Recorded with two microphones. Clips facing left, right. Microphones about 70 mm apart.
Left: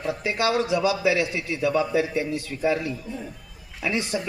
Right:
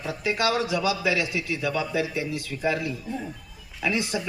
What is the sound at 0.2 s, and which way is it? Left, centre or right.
A man's voice, left.